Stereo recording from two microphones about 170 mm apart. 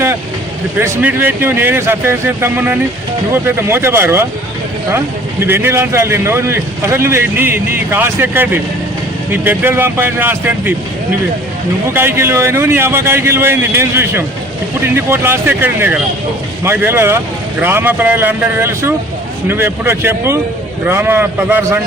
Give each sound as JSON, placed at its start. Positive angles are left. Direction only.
{"t": 0.8, "sound": "a man's voice", "side_deg": -10}
{"t": 11.9, "sound": "a man's voice", "side_deg": -15}